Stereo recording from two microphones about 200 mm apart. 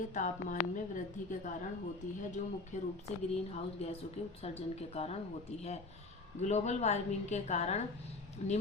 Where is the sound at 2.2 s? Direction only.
40° left (ahead or behind).